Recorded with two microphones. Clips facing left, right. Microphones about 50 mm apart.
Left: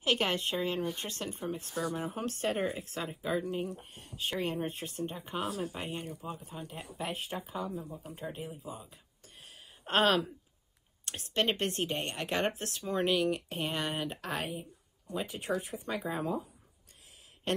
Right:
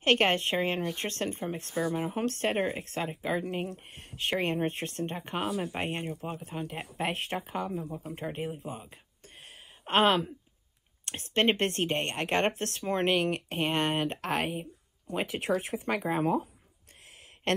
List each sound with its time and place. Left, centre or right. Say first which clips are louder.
0.0 s speech: right 5 dB; right
1.8 s speech: right 5 dB; right
2.1 s speech: right 4 dB; right
5.7 s speech: right 5 dB; right
6.3 s speech: right 6 dB; right
7.9 s speech: right 6 dB; right
8.2 s speech: right 5 dB; right
11.1 s speech: right 5 dB; right
15.1 s speech: right 4 dB; right
17.5 s a sound: right 4 dB; right